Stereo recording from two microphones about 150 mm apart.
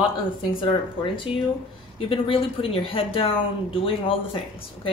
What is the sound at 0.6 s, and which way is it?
Speech, 35° left (ahead or behind).